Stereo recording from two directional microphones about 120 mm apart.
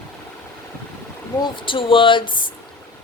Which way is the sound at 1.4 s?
45° left (ahead or behind).